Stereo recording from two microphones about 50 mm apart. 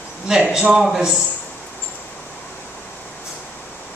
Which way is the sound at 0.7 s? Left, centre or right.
Centre.